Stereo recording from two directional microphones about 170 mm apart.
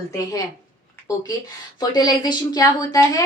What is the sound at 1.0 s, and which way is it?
Speech, 20° left (ahead or behind).